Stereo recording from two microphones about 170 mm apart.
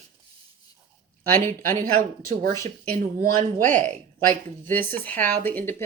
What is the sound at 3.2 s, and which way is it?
Speech, 50° right (ahead or behind).